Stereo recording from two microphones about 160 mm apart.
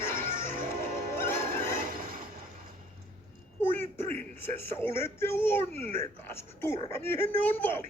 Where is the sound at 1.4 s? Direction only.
60° right (ahead or behind).